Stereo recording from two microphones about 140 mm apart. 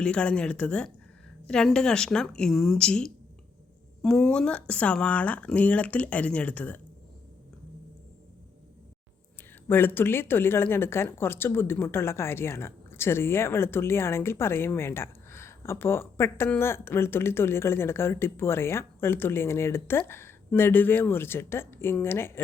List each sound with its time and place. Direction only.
0.0 s a woman's voice: 5° left (ahead or behind)
9.6 s speech: 15° left (ahead or behind)